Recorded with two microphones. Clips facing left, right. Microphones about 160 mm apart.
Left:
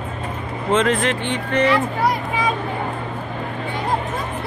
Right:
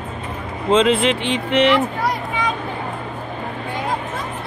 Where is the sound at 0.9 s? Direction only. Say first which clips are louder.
Right 3 dB; 90° right.